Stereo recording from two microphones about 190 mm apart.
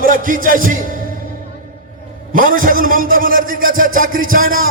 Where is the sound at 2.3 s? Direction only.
45° right (ahead or behind).